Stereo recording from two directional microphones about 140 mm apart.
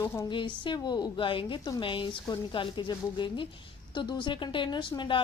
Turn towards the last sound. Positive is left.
turn(degrees=35)  # may be behind; listen again after turning